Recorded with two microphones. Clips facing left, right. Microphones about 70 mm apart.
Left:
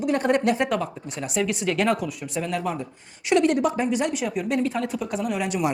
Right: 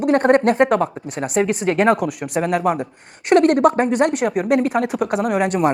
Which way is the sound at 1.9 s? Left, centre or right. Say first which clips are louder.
Right 7 dB; right.